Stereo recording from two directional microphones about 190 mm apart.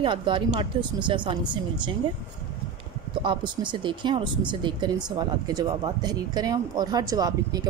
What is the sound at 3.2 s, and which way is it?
Speech, 25° right (ahead or behind).